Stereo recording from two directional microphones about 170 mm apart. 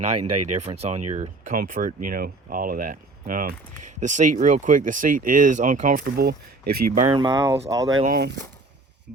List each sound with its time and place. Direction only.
0.5 s speech: 40° right (ahead or behind); by 7.0 s 60° right (ahead or behind)
7.1 s speech: 25° right (ahead or behind)
8.0 s speech: 60° right (ahead or behind)